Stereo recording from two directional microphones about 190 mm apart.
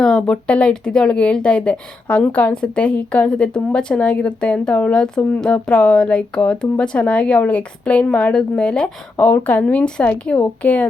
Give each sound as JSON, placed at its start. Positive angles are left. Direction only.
{"t": 0.0, "sound": "speech", "side_deg": 0}